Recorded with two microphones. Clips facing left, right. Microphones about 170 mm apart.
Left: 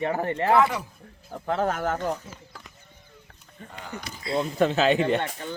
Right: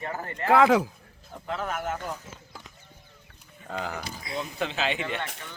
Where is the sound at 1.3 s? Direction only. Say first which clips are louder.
Left 6 dB; 40° left (ahead or behind).